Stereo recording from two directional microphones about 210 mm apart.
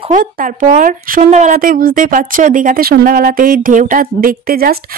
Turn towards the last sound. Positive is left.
turn(degrees=-45)  # may be behind; listen again after turning